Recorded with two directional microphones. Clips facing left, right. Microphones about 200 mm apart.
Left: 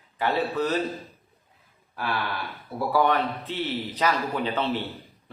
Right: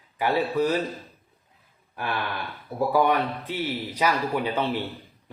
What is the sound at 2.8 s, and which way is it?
A man's voice, 15° right (ahead or behind).